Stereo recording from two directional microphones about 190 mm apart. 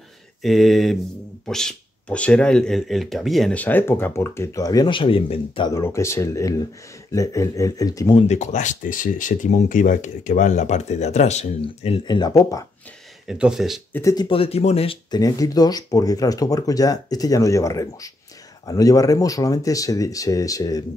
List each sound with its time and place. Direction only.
0.4 s speech: centre (ahead or behind); by 5.7 s 30° left (ahead or behind)
5.7 s speech: 15° left (ahead or behind)
13.3 s speech: 5° right (ahead or behind)
13.9 s speech: 15° left (ahead or behind)
14.3 s speech: 30° left (ahead or behind)